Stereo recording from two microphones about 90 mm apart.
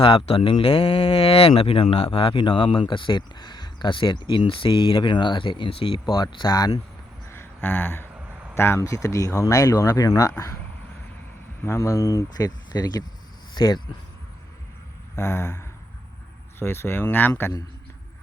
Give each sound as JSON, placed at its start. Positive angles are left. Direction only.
{"t": 0.0, "sound": "speech", "side_deg": 75}
{"t": 6.1, "sound": "speech", "side_deg": 50}
{"t": 7.3, "sound": "a sound", "side_deg": 25}
{"t": 8.5, "sound": "speech", "side_deg": 30}
{"t": 11.6, "sound": "speech", "side_deg": 30}
{"t": 15.1, "sound": "speech", "side_deg": 30}